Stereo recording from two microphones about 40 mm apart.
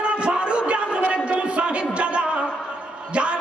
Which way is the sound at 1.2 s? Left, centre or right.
Right.